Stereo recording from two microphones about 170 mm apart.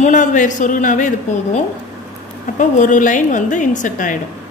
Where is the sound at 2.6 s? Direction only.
50° left (ahead or behind).